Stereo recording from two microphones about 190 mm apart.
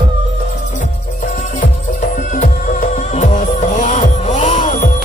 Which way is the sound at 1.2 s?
40° left (ahead or behind).